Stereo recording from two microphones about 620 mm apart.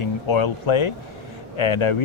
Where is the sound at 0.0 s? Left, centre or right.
Left.